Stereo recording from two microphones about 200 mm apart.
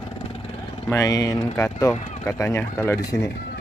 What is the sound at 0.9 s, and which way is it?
Speech, 15° left (ahead or behind).